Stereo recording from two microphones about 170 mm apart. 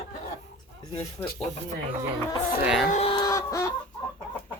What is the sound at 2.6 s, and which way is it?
Speech, centre (ahead or behind).